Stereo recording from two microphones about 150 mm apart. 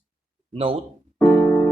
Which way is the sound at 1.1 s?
5° left (ahead or behind).